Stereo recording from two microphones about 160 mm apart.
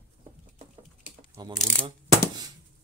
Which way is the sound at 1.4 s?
25° right (ahead or behind).